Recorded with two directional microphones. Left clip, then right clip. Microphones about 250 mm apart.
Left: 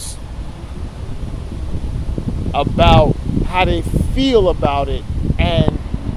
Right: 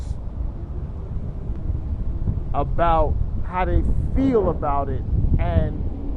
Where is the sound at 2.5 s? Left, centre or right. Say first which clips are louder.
Left 7 dB; left.